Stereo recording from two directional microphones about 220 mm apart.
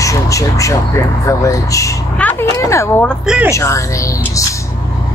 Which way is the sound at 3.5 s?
15° left (ahead or behind).